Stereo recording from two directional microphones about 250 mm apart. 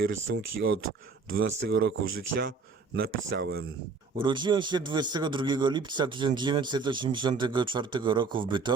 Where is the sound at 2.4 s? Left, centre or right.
Right.